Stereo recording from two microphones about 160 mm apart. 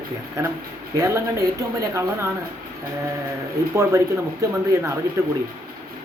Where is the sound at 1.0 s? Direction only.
20° right (ahead or behind).